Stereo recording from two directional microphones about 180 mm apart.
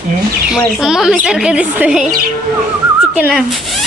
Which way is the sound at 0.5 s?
Centre (ahead or behind).